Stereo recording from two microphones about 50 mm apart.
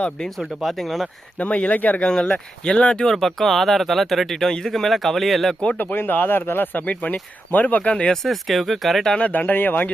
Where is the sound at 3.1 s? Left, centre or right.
Centre.